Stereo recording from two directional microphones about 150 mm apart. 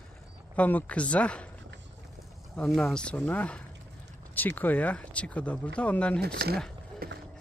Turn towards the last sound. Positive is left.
turn(degrees=-90)